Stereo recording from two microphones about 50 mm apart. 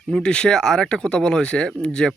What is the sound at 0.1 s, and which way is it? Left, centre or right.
Speech, centre.